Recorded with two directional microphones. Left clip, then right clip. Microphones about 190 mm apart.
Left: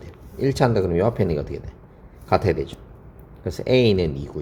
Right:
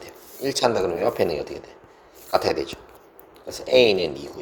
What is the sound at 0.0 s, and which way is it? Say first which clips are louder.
Speech: left 4 dB; 25° right (ahead or behind).